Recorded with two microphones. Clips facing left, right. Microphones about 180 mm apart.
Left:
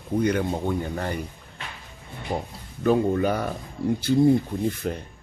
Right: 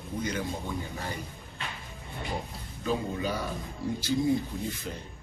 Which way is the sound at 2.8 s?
55° left (ahead or behind).